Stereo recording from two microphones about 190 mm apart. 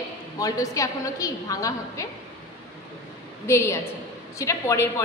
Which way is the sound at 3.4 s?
15° left (ahead or behind).